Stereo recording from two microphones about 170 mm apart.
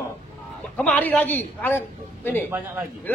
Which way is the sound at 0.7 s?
10° left (ahead or behind).